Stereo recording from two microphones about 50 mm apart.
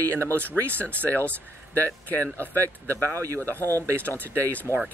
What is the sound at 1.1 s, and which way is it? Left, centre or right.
Speech, left.